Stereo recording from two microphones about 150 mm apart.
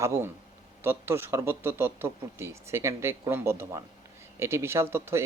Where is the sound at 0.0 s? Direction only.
20° right (ahead or behind).